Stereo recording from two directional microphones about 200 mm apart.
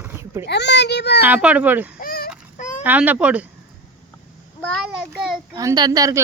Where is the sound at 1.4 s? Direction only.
10° right (ahead or behind).